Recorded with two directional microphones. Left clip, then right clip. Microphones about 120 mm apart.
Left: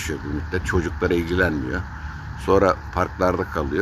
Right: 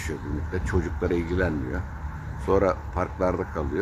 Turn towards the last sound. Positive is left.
turn(degrees=20)  # may be behind; listen again after turning